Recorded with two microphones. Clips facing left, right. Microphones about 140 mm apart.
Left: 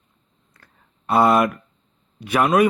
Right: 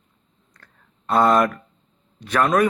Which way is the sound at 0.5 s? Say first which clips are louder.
Right 1 dB; 10° left (ahead or behind).